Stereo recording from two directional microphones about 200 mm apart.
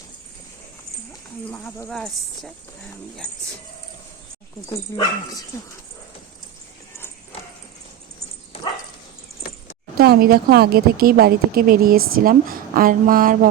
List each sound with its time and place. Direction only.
1.5 s speech: 5° left (ahead or behind)
4.9 s speech: 15° left (ahead or behind)
10.0 s a woman's voice: 50° right (ahead or behind)